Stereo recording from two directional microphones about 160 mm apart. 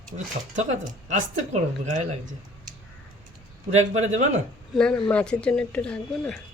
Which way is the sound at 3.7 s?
45° right (ahead or behind).